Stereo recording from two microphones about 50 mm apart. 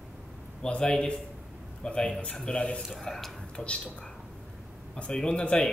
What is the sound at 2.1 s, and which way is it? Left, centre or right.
Speech, centre.